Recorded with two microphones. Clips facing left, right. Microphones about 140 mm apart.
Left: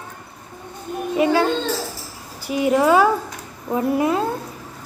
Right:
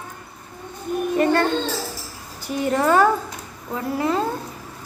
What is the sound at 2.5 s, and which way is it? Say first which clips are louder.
Speech: left 3 dB; 10° left (ahead or behind).